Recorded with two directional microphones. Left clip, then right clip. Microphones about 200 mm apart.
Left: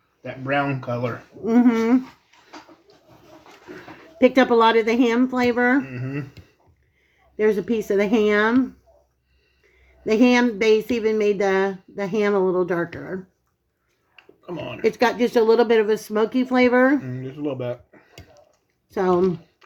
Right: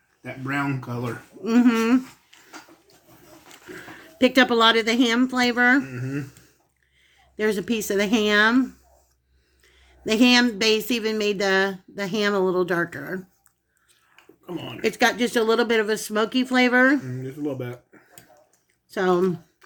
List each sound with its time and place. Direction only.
0.4 s speech: 20° left (ahead or behind)
1.5 s a woman's voice: centre (ahead or behind)
4.0 s a woman's voice: centre (ahead or behind)
7.3 s a woman's voice: 5° right (ahead or behind)
10.1 s a woman's voice: 5° right (ahead or behind)
14.8 s a woman's voice: centre (ahead or behind)
17.1 s speech: 40° left (ahead or behind)
18.9 s a woman's voice: centre (ahead or behind)